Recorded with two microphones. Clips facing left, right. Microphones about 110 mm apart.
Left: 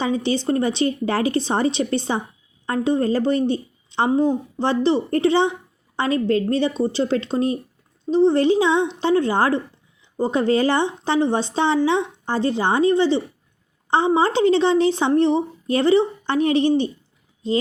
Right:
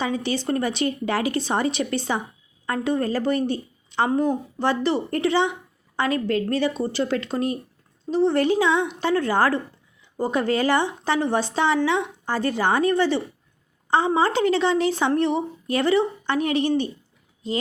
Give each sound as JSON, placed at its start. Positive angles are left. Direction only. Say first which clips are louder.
{"t": 0.0, "sound": "a woman's voice", "louder": "left 4 dB", "side_deg": 30}